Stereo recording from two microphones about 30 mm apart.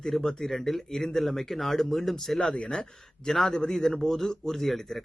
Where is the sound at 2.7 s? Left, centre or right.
Centre.